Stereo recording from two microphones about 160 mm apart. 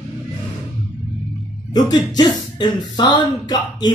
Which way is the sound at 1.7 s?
25° left (ahead or behind).